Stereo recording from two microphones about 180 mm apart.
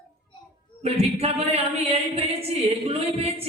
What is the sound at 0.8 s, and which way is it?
Speech, 35° right (ahead or behind).